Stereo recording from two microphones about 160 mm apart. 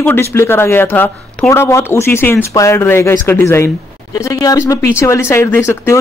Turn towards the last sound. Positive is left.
turn(degrees=15)  # may be behind; listen again after turning